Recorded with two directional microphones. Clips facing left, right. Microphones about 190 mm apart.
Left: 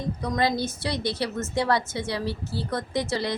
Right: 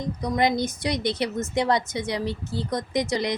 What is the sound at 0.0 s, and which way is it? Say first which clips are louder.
Speech: right 2 dB; 15° right (ahead or behind).